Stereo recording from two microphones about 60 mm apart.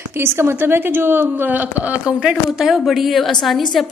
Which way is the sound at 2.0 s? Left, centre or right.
Centre.